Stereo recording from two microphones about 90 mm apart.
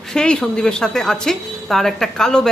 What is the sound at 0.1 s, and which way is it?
A woman's voice, 10° left (ahead or behind).